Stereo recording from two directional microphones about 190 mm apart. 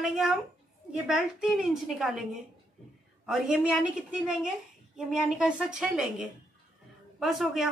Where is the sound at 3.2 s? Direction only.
Centre (ahead or behind).